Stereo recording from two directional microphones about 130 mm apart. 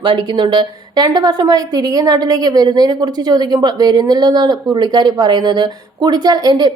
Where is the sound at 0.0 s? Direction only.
35° right (ahead or behind).